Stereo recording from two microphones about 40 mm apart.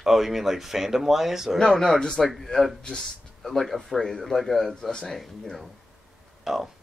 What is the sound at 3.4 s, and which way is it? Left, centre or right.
Speech, centre.